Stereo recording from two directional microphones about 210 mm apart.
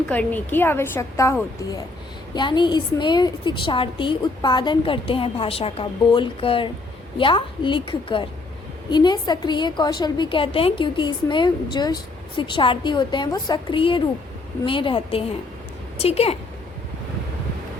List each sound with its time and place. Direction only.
0.1 s a woman's voice: 5° left (ahead or behind); by 16.4 s 30° left (ahead or behind)